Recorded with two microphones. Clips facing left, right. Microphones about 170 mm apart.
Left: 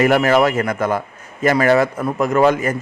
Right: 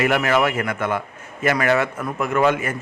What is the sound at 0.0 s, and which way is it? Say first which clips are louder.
A man's voice: left 5 dB; 35° left (ahead or behind).